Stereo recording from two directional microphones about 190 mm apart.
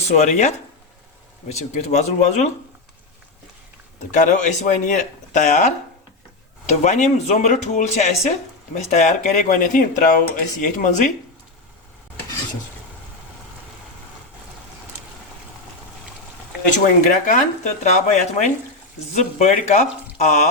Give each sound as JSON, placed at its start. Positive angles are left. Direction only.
{"t": 0.1, "sound": "speech", "side_deg": 40}
{"t": 4.1, "sound": "speech", "side_deg": 40}
{"t": 17.0, "sound": "speech", "side_deg": 40}